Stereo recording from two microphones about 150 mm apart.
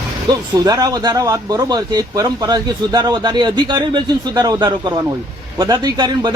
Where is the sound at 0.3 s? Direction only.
25° right (ahead or behind).